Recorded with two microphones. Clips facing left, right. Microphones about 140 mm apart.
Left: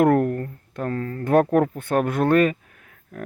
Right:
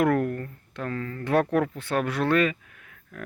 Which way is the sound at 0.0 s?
40° left (ahead or behind).